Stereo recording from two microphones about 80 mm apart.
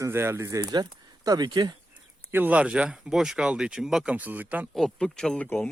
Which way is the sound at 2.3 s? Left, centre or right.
Right.